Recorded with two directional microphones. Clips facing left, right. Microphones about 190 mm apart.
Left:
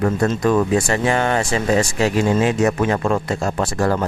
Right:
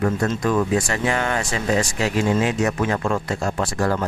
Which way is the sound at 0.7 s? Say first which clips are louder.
Left 4 dB; 30° left (ahead or behind).